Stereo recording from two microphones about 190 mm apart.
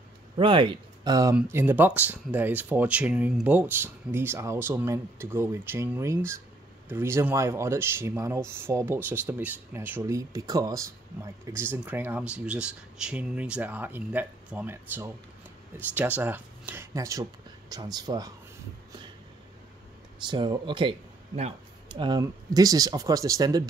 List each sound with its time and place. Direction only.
0.4 s speech: 25° right (ahead or behind)
20.2 s speech: 25° right (ahead or behind)